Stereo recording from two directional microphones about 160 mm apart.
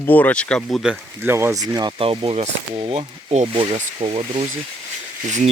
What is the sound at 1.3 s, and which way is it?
Speech, 15° right (ahead or behind).